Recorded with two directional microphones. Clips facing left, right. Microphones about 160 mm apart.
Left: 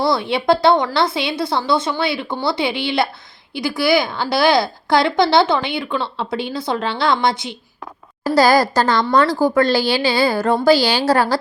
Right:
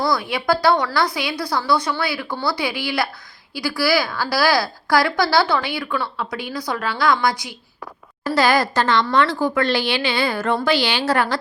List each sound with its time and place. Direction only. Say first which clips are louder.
0.0 s a woman's voice: left 4 dB; 25° left (ahead or behind)
8.4 s a woman's voice: left 4 dB; 35° left (ahead or behind)